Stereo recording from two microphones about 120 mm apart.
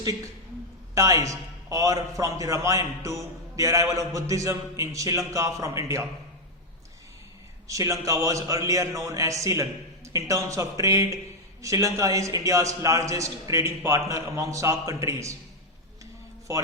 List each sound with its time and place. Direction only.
0.9 s a man's voice: 25° right (ahead or behind)
7.7 s a man's voice: 25° right (ahead or behind)
16.5 s a man's voice: 30° right (ahead or behind)